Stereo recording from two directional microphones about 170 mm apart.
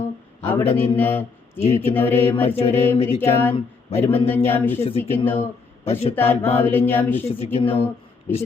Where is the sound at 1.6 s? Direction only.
40° left (ahead or behind).